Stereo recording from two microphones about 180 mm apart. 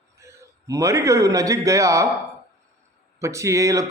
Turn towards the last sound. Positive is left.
turn(degrees=-15)  # may be behind; listen again after turning